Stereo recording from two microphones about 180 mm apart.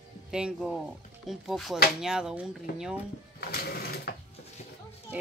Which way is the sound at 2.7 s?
60° left (ahead or behind).